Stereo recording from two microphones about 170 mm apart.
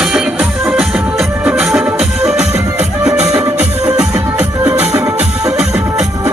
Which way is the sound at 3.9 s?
10° right (ahead or behind).